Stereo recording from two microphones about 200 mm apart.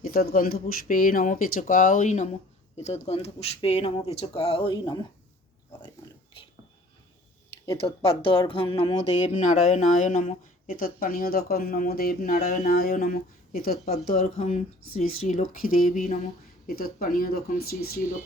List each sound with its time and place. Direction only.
0.0 s speech: 45° left (ahead or behind); by 5.0 s 25° left (ahead or behind)
7.7 s speech: 30° left (ahead or behind); by 17.9 s 50° left (ahead or behind)